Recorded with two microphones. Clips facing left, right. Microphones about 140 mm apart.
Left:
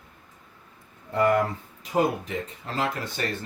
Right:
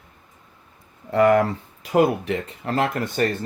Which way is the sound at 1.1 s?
90° right.